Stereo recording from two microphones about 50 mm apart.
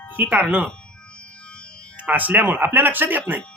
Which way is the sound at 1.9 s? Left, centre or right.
Right.